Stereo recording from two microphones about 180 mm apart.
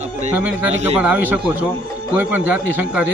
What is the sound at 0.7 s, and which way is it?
Speech, 40° right (ahead or behind).